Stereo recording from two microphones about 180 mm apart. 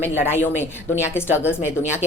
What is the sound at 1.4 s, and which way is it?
Speech, 15° left (ahead or behind).